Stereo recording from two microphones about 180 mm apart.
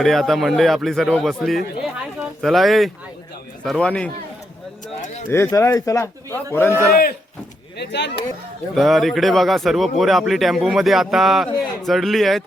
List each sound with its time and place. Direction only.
0.0 s a man's voice: centre (ahead or behind)
4.9 s speech: 45° left (ahead or behind)
5.3 s a man's voice: 15° left (ahead or behind)
6.9 s speech: 55° left (ahead or behind)
7.8 s speech: 70° left (ahead or behind)
8.7 s a man's voice: centre (ahead or behind)